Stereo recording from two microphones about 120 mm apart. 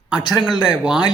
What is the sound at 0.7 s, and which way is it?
Speech, centre (ahead or behind).